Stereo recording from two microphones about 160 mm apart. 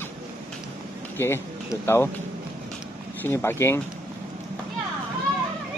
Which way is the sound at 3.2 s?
15° left (ahead or behind).